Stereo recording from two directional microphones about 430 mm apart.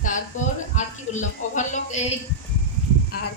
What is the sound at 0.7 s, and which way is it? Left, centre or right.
A man's voice, centre.